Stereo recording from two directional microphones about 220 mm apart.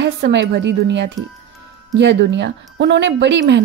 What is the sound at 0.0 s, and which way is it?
A woman's voice, 50° right (ahead or behind).